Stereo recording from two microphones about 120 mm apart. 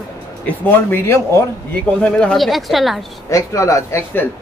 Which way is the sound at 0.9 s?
20° left (ahead or behind).